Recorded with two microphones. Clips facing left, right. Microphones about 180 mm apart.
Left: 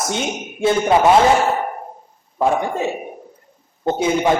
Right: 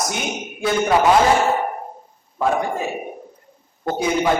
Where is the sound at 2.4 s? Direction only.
25° left (ahead or behind).